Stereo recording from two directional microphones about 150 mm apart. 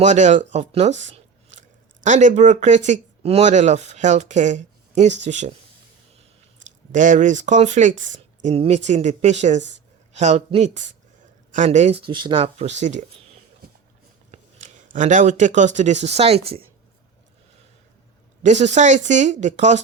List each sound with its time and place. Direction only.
0.0 s speech: 50° right (ahead or behind)
6.6 s speech: 55° right (ahead or behind)
14.3 s speech: 55° right (ahead or behind)
18.4 s speech: 50° right (ahead or behind)